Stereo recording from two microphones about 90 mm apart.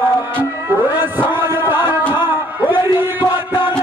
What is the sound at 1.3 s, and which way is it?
Chant, 20° right (ahead or behind).